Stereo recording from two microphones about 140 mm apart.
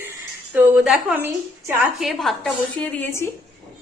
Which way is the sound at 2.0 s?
Centre (ahead or behind).